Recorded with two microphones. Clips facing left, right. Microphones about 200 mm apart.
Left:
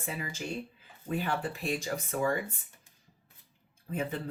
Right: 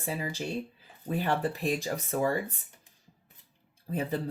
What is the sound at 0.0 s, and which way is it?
Speech, 35° right (ahead or behind).